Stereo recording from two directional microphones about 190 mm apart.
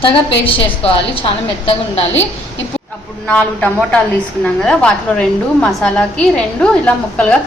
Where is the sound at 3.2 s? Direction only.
5° left (ahead or behind).